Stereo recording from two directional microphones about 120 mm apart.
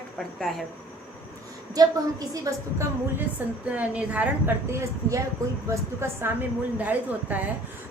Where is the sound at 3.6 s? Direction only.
10° right (ahead or behind).